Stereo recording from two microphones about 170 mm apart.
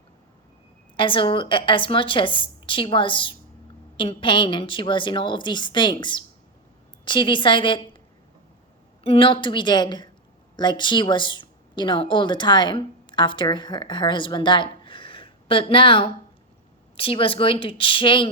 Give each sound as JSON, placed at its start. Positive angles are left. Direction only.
{"t": 0.9, "sound": "a woman's voice", "side_deg": 30}
{"t": 9.0, "sound": "a woman's voice", "side_deg": 30}